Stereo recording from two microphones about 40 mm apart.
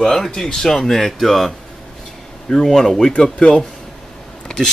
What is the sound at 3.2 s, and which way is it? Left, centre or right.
Speech, left.